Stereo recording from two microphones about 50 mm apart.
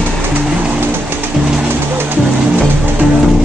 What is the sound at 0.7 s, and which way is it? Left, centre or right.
Bird, right.